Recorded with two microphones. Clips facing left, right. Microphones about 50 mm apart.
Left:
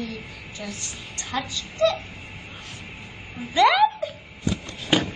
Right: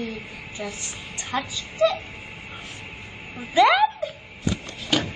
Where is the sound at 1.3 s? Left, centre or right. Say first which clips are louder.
Right 2 dB; centre.